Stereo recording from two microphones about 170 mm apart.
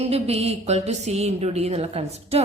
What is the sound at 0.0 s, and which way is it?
A woman's voice, 35° right (ahead or behind).